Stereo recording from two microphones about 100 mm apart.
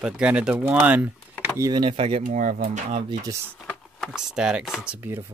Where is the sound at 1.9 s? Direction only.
80° right.